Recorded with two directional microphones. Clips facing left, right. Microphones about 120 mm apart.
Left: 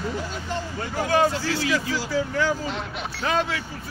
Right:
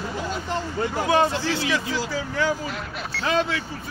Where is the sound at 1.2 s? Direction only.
25° right (ahead or behind).